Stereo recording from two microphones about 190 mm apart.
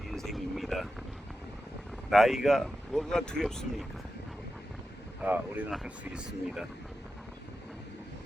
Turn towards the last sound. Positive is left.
turn(degrees=-5)  # may be behind; listen again after turning